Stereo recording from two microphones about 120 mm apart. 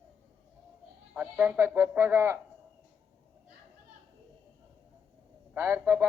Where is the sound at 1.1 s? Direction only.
10° right (ahead or behind).